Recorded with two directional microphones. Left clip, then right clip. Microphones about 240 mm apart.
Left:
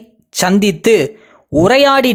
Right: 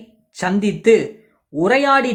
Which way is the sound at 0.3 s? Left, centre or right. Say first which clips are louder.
Left 7 dB; left.